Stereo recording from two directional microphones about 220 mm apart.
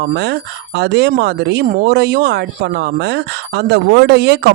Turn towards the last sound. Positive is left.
turn(degrees=-50)  # may be behind; listen again after turning